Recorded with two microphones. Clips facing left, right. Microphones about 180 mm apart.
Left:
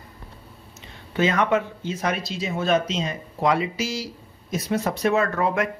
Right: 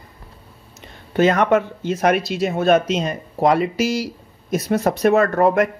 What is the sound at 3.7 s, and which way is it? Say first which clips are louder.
Speech: right 8 dB; 65° right (ahead or behind).